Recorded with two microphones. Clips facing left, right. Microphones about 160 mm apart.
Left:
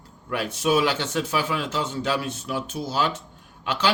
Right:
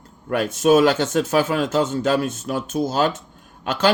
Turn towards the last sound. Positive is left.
turn(degrees=-45)  # may be behind; listen again after turning